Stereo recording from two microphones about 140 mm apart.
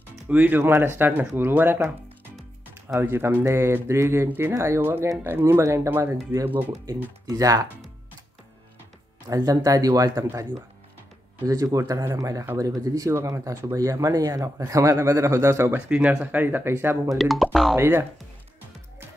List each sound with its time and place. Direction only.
0.3 s speech: 10° right (ahead or behind)
3.0 s speech: 15° right (ahead or behind)
7.2 s speech: 25° right (ahead or behind)
9.3 s speech: 25° right (ahead or behind)
17.1 s speech: centre (ahead or behind)
17.7 s speech: 20° right (ahead or behind)